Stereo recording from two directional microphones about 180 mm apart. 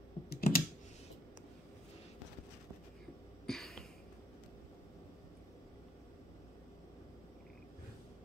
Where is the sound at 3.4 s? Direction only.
Centre (ahead or behind).